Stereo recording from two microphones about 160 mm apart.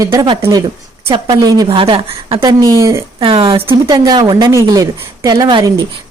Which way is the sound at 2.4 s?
20° right (ahead or behind).